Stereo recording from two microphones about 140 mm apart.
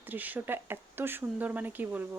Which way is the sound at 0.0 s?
10° right (ahead or behind).